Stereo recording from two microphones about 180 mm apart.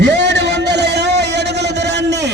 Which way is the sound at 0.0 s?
70° right (ahead or behind).